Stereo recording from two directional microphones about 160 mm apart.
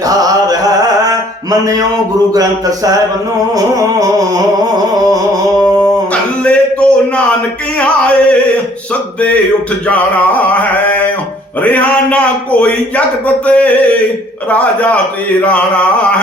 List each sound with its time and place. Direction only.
0.1 s music: 25° right (ahead or behind)
2.3 s speech: 20° right (ahead or behind)
6.4 s a sound: 5° left (ahead or behind)
7.8 s music: 10° left (ahead or behind)
9.9 s a sound: 10° left (ahead or behind)
11.6 s speech: 10° left (ahead or behind)